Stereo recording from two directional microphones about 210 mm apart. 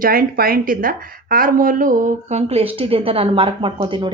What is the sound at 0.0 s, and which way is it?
A woman's voice, 45° right (ahead or behind).